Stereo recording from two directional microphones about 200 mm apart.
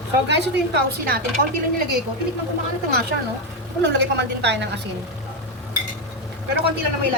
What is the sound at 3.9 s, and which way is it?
Speech, 60° right (ahead or behind).